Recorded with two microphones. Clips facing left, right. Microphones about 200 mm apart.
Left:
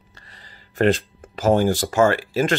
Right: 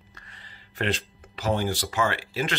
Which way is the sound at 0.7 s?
45° left (ahead or behind).